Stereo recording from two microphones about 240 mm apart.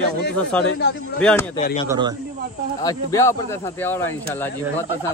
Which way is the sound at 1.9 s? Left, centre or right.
Centre.